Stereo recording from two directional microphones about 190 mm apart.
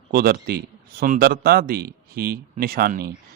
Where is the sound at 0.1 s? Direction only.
55° right (ahead or behind).